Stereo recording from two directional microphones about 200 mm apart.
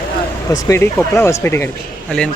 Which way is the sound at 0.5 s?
10° left (ahead or behind).